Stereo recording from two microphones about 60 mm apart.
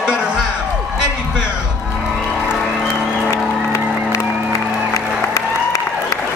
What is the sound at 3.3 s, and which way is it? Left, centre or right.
Music, left.